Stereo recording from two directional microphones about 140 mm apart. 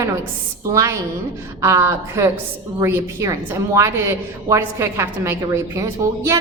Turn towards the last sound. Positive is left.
turn(degrees=-20)  # may be behind; listen again after turning